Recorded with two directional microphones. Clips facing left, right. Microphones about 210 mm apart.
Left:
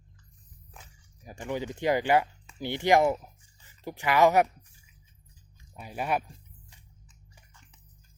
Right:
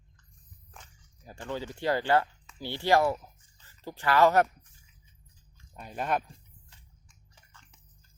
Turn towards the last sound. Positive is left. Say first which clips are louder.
# left 1 dB
turn(degrees=15)  # may be behind; listen again after turning